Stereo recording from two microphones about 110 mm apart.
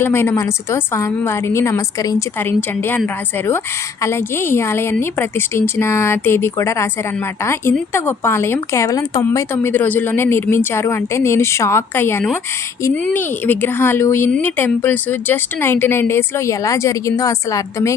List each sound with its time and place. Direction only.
0.0 s speech: 20° left (ahead or behind)
2.4 s speech: 20° left (ahead or behind)
9.7 s speech: 15° left (ahead or behind)